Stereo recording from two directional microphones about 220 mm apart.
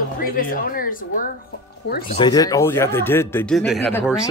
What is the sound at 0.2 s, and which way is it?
Speech, 40° left (ahead or behind).